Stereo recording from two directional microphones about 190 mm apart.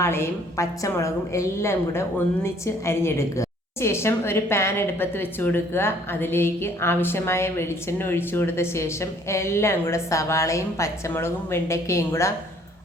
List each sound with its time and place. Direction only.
0.0 s a woman's voice: 15° left (ahead or behind)